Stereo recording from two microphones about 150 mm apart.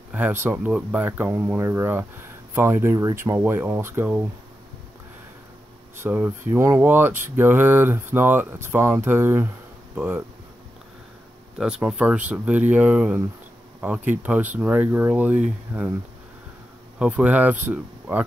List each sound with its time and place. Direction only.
0.1 s speech: 10° right (ahead or behind)
5.9 s speech: 10° right (ahead or behind)
11.5 s speech: 5° right (ahead or behind)
17.0 s speech: 10° right (ahead or behind)